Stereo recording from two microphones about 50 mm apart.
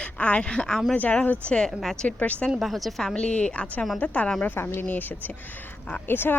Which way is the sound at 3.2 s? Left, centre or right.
Left.